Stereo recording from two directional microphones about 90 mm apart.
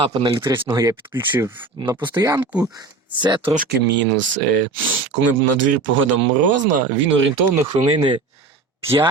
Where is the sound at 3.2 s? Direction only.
60° right (ahead or behind).